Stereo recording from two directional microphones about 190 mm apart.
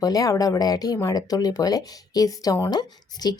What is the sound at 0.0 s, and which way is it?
Speech, 20° left (ahead or behind).